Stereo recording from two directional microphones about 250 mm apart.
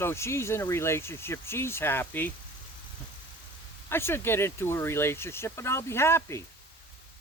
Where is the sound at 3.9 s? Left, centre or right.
Centre.